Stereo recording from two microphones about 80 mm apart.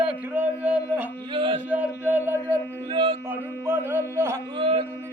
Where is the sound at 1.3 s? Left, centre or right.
Right.